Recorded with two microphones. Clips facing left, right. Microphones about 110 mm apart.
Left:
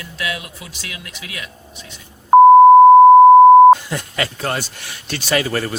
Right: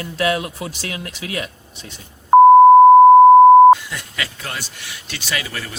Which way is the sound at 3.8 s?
45° left (ahead or behind).